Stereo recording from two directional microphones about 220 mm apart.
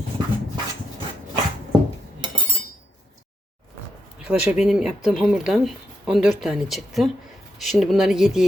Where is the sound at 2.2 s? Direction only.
20° right (ahead or behind).